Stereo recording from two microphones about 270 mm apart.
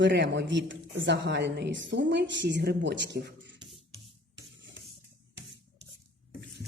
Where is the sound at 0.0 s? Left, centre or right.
Right.